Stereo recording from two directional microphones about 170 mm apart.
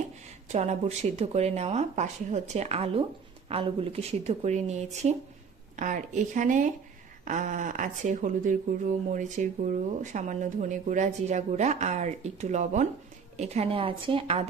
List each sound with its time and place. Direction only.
0.4 s speech: 40° right (ahead or behind)